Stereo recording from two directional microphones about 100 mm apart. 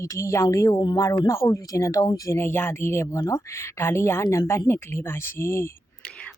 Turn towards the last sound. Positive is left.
turn(degrees=25)  # may be behind; listen again after turning